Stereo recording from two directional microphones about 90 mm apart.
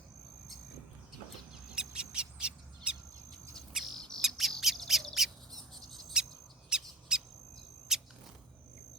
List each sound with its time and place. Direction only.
1.7 s bird: 10° right (ahead or behind)
3.9 s bird: 10° left (ahead or behind)
6.7 s owl: 10° right (ahead or behind)
7.9 s a sound: 5° right (ahead or behind)